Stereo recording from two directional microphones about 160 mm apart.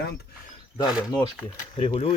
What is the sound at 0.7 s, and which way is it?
Speech, 25° left (ahead or behind).